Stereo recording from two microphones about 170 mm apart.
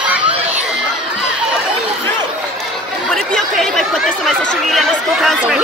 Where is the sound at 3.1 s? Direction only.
Centre (ahead or behind).